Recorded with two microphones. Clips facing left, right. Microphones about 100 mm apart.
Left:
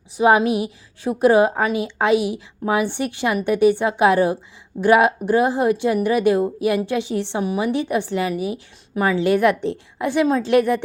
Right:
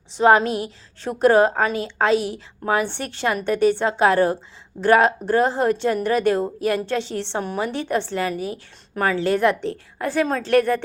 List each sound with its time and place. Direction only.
0.2 s a woman's voice: 15° left (ahead or behind)